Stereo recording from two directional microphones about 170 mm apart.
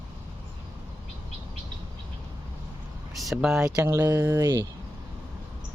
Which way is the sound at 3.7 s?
15° right (ahead or behind).